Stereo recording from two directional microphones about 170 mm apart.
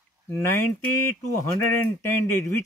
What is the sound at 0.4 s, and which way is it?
Speech, 15° left (ahead or behind).